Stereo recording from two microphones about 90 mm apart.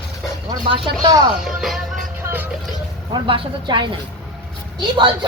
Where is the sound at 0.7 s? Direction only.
80° right.